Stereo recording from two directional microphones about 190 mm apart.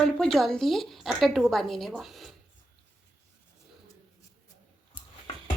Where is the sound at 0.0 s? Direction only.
5° left (ahead or behind).